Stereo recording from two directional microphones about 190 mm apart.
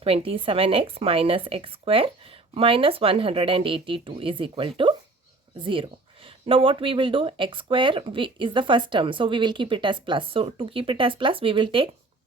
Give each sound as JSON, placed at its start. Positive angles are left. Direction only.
{"t": 0.0, "sound": "speech", "side_deg": -30}